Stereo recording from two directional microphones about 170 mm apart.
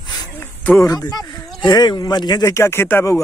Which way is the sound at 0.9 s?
20° left (ahead or behind).